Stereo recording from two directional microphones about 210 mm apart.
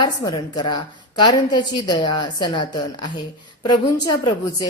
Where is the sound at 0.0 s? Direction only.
20° left (ahead or behind).